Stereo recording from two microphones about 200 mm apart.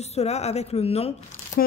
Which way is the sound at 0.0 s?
35° left (ahead or behind).